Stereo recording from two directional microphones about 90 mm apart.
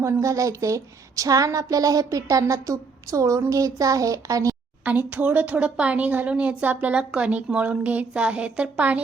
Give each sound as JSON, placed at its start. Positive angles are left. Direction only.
{"t": 0.0, "sound": "a woman's voice", "side_deg": -35}
{"t": 4.9, "sound": "a woman's voice", "side_deg": -20}